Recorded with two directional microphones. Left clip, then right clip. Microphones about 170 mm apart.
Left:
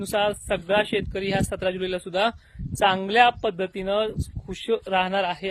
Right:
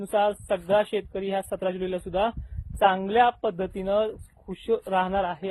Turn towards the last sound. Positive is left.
turn(degrees=30)  # may be behind; listen again after turning